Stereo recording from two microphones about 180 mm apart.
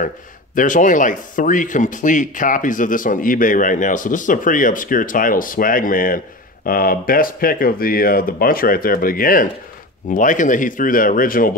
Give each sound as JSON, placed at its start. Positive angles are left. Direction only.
{"t": 0.6, "sound": "speech", "side_deg": 45}